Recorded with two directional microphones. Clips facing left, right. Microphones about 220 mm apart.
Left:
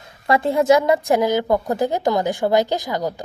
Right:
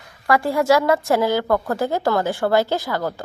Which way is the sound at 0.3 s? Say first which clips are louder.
Left 2 dB; 20° left (ahead or behind).